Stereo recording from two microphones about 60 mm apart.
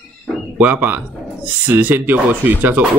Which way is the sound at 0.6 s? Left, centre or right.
Right.